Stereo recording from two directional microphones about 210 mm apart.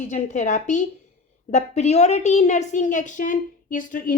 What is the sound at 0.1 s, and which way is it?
A woman's voice, 35° left (ahead or behind).